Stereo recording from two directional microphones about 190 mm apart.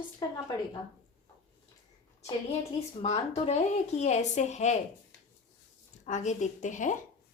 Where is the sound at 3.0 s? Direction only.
30° left (ahead or behind).